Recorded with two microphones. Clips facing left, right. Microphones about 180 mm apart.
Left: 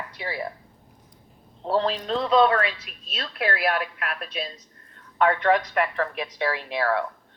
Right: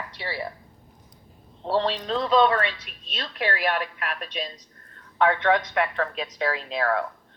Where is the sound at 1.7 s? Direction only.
5° left (ahead or behind).